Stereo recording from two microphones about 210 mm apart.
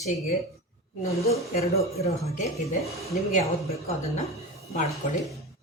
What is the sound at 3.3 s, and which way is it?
Speech, 30° left (ahead or behind).